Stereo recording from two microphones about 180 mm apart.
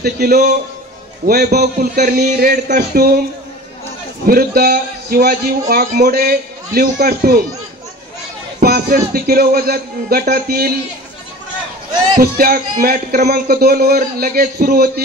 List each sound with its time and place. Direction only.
0.0 s a man's voice: 60° right (ahead or behind)
4.3 s a man's voice: 55° right (ahead or behind)
8.5 s a man's voice: 55° right (ahead or behind)
12.2 s a man's voice: 55° right (ahead or behind)